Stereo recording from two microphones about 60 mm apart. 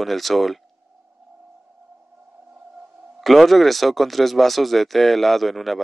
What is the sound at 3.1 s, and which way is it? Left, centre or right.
Speech, centre.